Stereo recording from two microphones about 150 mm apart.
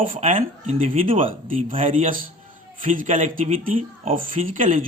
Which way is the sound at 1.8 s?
60° right (ahead or behind).